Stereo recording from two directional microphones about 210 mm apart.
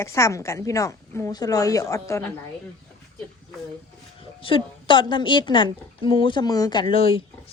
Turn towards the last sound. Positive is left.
turn(degrees=25)  # may be behind; listen again after turning